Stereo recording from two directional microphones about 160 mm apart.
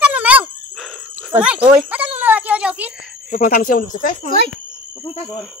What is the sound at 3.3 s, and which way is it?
Speech, 60° left (ahead or behind).